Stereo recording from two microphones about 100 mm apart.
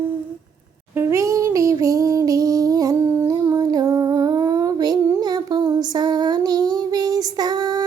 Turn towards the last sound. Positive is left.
turn(degrees=-45)  # may be behind; listen again after turning